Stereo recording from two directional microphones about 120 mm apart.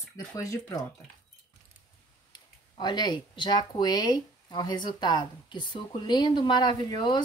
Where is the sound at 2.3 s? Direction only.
35° left (ahead or behind).